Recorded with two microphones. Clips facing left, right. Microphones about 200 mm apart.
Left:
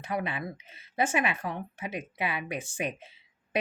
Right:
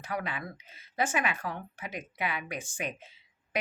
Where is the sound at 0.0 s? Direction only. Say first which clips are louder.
Left 3 dB; 25° left (ahead or behind).